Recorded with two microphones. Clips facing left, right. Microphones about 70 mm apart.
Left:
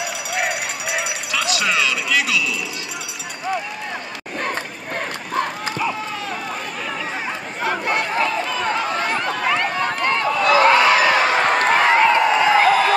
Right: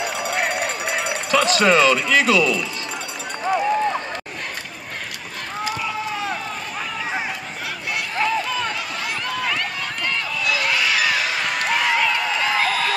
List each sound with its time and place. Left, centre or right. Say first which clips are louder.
0.0 s run: right 1 dB; centre
1.0 s speech: right 5 dB; right
8.6 s run: left 6 dB; left
9.8 s a sound: left 6 dB; left